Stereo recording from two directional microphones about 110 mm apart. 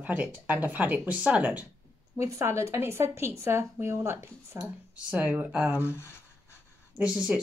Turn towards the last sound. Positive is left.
turn(degrees=-10)  # may be behind; listen again after turning